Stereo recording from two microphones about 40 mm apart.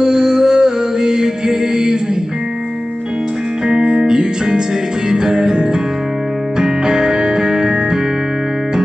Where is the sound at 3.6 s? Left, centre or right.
Right.